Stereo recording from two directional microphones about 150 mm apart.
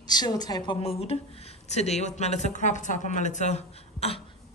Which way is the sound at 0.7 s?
40° left (ahead or behind).